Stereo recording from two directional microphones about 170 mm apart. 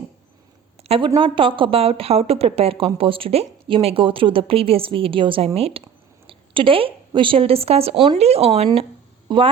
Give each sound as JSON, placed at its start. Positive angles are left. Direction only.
{"t": 0.9, "sound": "a woman's voice", "side_deg": -30}